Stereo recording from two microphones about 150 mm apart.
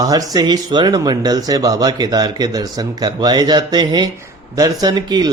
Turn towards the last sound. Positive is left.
turn(degrees=-25)  # may be behind; listen again after turning